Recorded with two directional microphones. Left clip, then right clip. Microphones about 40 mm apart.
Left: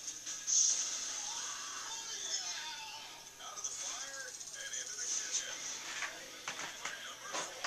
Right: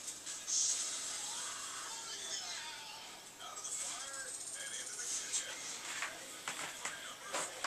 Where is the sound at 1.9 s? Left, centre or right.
Left.